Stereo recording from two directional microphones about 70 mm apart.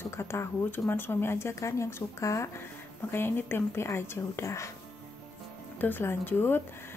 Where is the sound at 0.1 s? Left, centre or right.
Left.